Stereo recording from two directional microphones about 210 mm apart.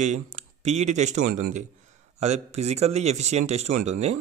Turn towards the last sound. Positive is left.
turn(degrees=-30)  # may be behind; listen again after turning